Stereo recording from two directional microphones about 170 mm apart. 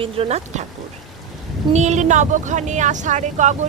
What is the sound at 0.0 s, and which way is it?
Speech, 35° right (ahead or behind).